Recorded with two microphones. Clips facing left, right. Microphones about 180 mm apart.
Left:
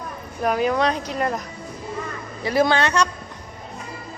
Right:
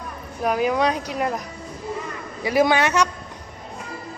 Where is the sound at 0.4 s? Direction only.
5° right (ahead or behind).